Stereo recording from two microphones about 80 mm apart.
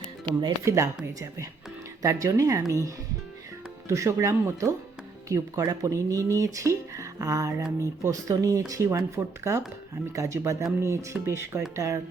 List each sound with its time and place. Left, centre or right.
0.6 s speech: right
2.0 s speech: right